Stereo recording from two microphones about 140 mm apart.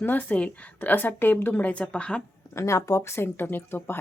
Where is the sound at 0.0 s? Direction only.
10° left (ahead or behind).